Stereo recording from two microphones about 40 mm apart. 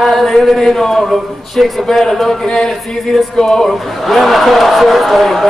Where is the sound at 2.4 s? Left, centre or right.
Centre.